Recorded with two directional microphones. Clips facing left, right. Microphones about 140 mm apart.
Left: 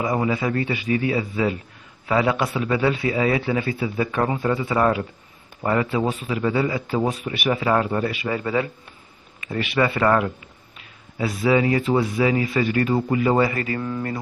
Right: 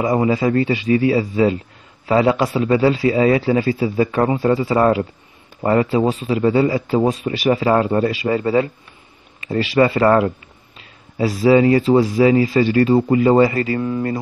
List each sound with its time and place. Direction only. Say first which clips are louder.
0.0 s speech: right 6 dB; 35° right (ahead or behind)